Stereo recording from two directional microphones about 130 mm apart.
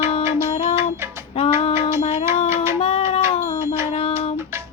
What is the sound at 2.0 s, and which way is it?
Music, 55° left (ahead or behind).